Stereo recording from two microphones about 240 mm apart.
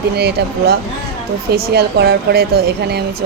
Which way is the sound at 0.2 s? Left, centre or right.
Right.